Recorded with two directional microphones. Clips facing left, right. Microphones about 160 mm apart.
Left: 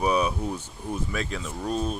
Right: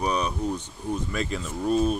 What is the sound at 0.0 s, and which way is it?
Speech, 5° left (ahead or behind).